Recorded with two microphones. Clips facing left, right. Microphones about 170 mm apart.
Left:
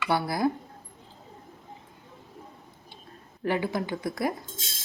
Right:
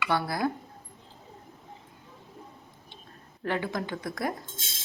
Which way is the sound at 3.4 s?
10° left (ahead or behind).